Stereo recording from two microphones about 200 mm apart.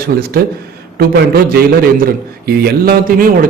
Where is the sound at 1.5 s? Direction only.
50° right (ahead or behind).